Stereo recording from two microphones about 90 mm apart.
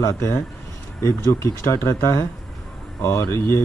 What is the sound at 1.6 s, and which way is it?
Speech, 30° left (ahead or behind).